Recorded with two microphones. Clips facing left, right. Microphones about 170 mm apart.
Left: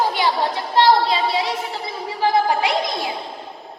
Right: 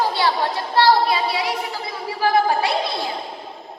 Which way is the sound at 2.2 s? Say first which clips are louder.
Even; 15° left (ahead or behind).